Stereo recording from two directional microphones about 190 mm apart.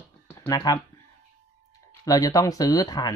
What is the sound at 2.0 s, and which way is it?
Speech, 20° left (ahead or behind).